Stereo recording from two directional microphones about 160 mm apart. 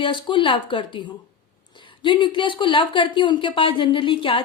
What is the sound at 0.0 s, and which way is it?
Speech, 30° left (ahead or behind).